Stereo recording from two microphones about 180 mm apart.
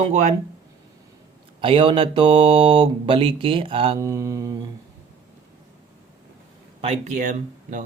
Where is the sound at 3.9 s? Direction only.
15° right (ahead or behind).